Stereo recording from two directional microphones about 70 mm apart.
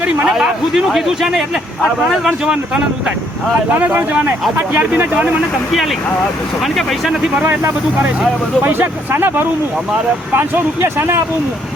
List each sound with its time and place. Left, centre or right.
0.3 s a man's voice: centre
3.8 s speech: right
6.7 s a man's voice: centre
8.6 s speech: right